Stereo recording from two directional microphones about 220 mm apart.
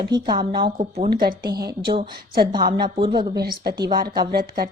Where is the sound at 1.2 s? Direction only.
45° right (ahead or behind).